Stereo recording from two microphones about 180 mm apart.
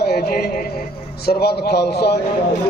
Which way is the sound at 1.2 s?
60° left (ahead or behind).